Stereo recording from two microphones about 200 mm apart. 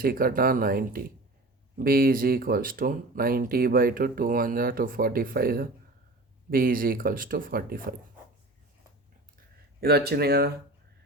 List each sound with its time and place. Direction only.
0.0 s speech: 50° right (ahead or behind)
9.8 s speech: 50° right (ahead or behind)